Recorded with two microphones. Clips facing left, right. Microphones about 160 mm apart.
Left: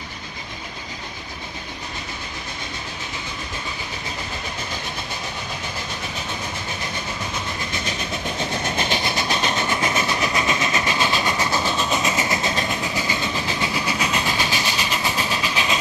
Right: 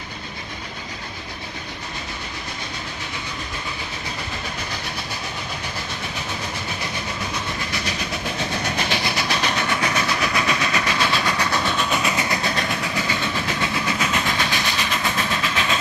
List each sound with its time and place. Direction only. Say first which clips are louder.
8.6 s train: left 1 dB; 20° left (ahead or behind)